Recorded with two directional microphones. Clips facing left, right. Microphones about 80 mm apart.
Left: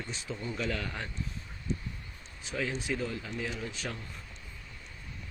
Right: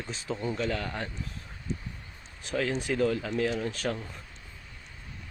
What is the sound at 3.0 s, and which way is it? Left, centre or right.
Speech, right.